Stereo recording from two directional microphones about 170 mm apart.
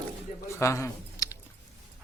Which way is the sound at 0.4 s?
15° left (ahead or behind).